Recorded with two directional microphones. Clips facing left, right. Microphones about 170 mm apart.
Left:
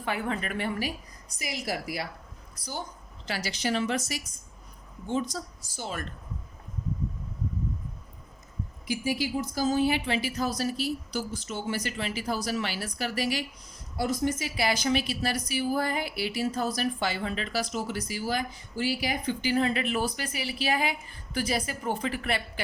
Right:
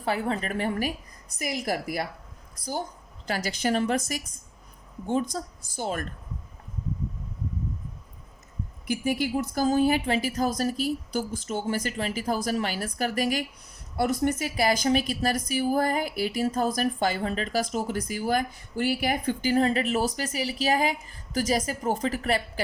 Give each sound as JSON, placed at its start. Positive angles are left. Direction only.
{"t": 0.0, "sound": "a woman's voice", "side_deg": -35}
{"t": 3.2, "sound": "a woman's voice", "side_deg": -50}
{"t": 8.9, "sound": "a woman's voice", "side_deg": -55}
{"t": 13.9, "sound": "a woman's voice", "side_deg": -60}